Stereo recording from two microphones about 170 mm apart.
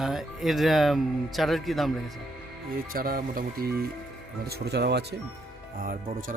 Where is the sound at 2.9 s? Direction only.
60° right (ahead or behind).